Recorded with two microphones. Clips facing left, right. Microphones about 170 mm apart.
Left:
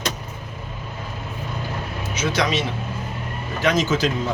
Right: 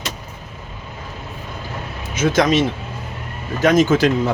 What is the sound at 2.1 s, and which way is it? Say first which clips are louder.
Speech: right 7 dB; 50° right (ahead or behind).